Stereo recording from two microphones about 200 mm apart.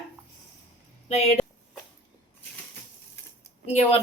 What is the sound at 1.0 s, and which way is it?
Speech, 35° left (ahead or behind).